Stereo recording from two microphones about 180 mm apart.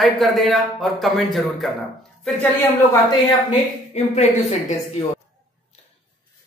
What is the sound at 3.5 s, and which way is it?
Speech, 35° left (ahead or behind).